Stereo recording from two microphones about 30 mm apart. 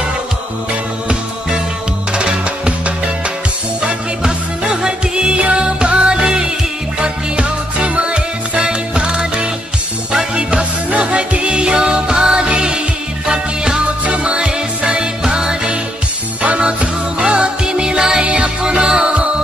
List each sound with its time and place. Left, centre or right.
2.1 s music: right
4.6 s music: right
10.9 s music: right
14.0 s music: right
17.2 s music: right
18.2 s music: right
18.6 s music: right